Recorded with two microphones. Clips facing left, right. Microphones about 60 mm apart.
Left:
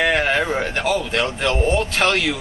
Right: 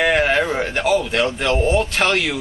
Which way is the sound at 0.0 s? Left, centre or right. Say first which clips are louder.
Right 2 dB; centre.